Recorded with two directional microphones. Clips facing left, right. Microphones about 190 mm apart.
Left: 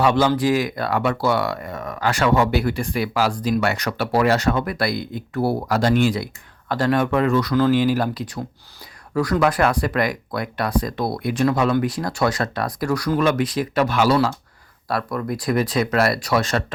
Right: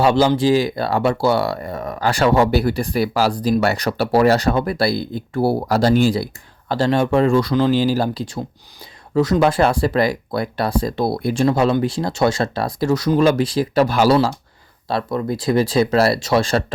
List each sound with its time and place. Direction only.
0.0 s speech: 30° right (ahead or behind)